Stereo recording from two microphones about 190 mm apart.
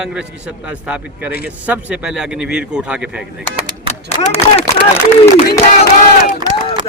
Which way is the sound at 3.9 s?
35° left (ahead or behind).